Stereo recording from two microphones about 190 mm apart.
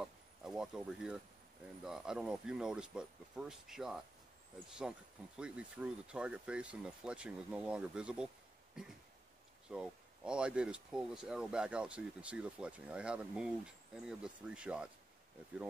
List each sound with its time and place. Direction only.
0.0 s a sound: 5° right (ahead or behind)
1.9 s speech: 5° right (ahead or behind)
9.7 s speech: 5° right (ahead or behind)